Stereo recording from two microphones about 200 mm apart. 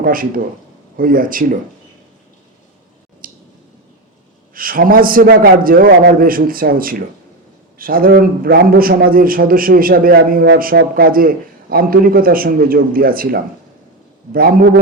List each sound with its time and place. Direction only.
0.0 s a man's voice: 45° right (ahead or behind)
3.2 s a sound: 45° right (ahead or behind)
4.5 s a man's voice: 45° right (ahead or behind)